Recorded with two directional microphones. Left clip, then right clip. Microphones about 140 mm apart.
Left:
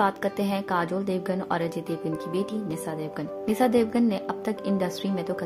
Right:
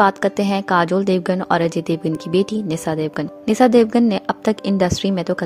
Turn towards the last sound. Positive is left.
turn(degrees=-55)  # may be behind; listen again after turning